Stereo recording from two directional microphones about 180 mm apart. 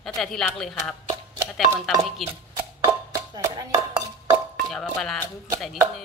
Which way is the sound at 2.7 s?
20° right (ahead or behind).